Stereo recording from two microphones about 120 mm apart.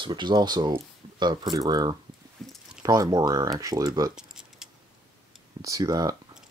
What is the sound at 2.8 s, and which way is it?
Speech, 30° right (ahead or behind).